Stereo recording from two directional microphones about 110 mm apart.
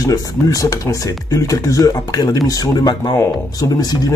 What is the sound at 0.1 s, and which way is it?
Speech, 30° left (ahead or behind).